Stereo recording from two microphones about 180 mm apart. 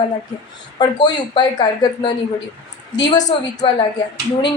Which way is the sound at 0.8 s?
25° left (ahead or behind).